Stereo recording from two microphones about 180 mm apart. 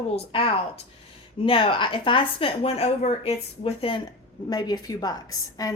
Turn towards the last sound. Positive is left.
turn(degrees=20)  # may be behind; listen again after turning